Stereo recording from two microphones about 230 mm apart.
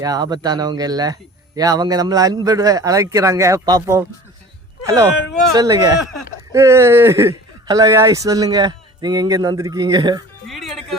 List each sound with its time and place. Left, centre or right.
0.0 s a man's voice: centre
5.5 s a man's voice: centre
10.4 s music: centre